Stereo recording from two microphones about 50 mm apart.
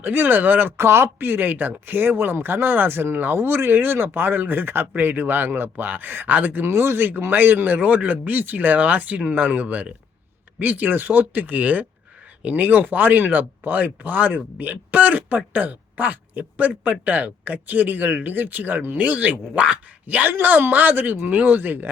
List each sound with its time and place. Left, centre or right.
0.0 s speech: right
0.8 s speech: right
1.2 s speech: right